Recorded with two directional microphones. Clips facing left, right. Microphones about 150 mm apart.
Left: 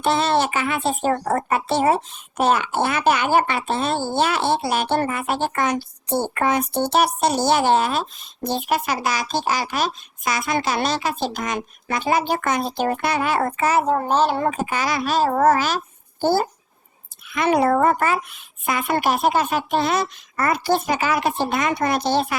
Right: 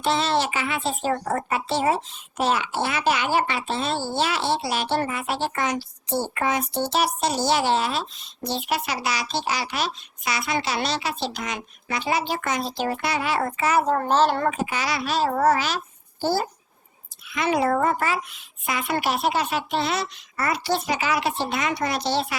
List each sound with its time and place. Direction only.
0.0 s speech: 55° left (ahead or behind)
13.8 s a child's voice: 10° left (ahead or behind)
14.5 s speech: 45° left (ahead or behind)